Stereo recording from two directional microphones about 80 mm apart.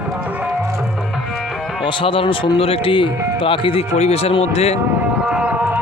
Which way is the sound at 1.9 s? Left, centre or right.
Left.